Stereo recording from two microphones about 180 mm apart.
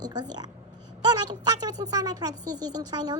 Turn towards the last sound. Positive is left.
turn(degrees=-20)  # may be behind; listen again after turning